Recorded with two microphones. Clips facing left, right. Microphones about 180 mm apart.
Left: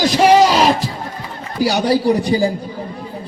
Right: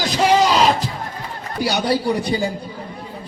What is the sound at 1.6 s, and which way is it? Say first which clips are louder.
Speech: left 5 dB; 35° left (ahead or behind).